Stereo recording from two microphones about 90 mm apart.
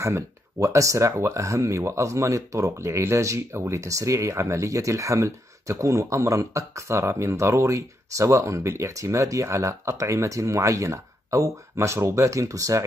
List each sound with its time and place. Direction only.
0.0 s speech: 35° right (ahead or behind)